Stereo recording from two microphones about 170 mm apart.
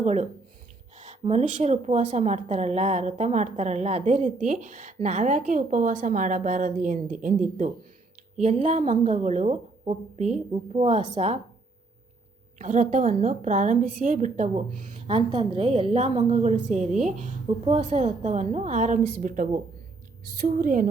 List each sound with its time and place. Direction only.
0.0 s a woman's voice: 45° right (ahead or behind)
12.5 s a woman's voice: 50° right (ahead or behind)